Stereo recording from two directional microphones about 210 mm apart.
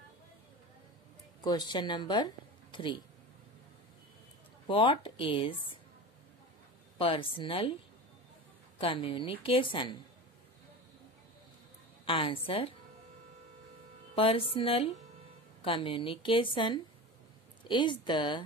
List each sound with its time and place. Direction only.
1.4 s speech: 20° left (ahead or behind)
4.6 s a woman's voice: 25° left (ahead or behind)
7.0 s a woman's voice: 25° left (ahead or behind)
8.7 s a woman's voice: 25° left (ahead or behind)
12.0 s a woman's voice: 25° left (ahead or behind)
14.1 s a woman's voice: 25° left (ahead or behind)